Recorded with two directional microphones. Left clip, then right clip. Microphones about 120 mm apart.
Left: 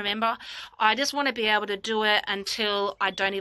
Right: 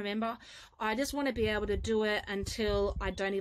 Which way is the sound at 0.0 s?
35° right (ahead or behind).